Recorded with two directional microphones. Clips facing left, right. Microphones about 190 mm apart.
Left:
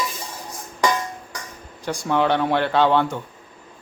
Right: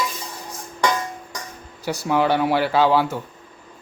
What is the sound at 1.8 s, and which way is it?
Speech, 5° right (ahead or behind).